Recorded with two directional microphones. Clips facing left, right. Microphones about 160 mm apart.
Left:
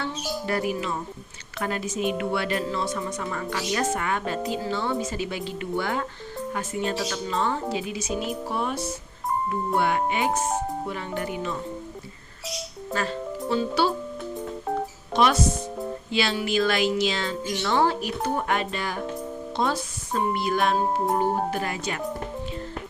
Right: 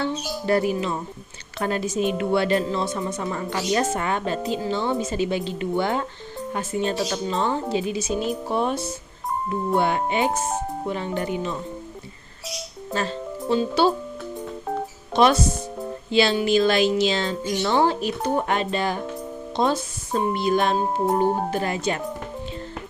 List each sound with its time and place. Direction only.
0.0 s speech: 30° right (ahead or behind)
12.9 s speech: 25° right (ahead or behind)
15.1 s speech: 30° right (ahead or behind)